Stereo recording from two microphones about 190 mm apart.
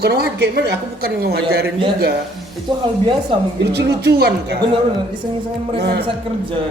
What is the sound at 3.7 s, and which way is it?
Speech, 60° right (ahead or behind).